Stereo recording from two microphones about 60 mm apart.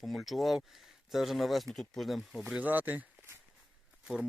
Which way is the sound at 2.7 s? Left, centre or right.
Right.